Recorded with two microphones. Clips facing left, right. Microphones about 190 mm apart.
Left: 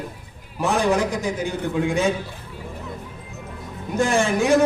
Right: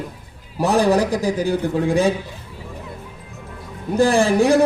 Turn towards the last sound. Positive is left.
turn(degrees=-35)  # may be behind; listen again after turning